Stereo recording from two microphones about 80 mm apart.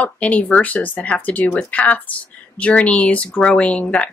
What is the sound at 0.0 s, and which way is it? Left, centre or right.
Speech, centre.